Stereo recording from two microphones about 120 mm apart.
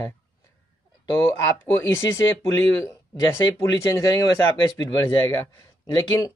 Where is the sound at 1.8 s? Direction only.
20° left (ahead or behind).